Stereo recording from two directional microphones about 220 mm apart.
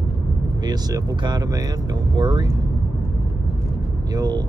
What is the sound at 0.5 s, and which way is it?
Speech, 20° right (ahead or behind).